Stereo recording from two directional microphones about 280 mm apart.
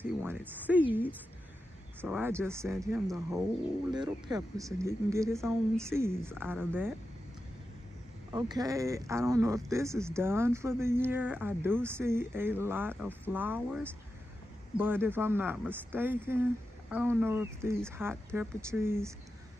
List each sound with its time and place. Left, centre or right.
0.0 s a woman's voice: centre
8.3 s speech: centre